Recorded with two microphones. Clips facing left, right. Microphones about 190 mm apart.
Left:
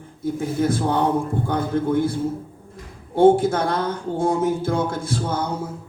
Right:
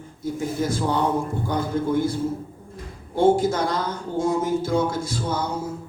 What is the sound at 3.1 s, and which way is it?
A woman's voice, 55° left (ahead or behind).